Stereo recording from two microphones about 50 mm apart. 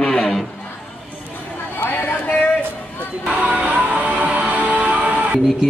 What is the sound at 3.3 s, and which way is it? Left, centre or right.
Music, right.